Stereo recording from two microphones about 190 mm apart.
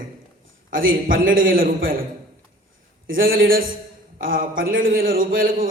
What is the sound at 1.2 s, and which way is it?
Speech, 45° right (ahead or behind).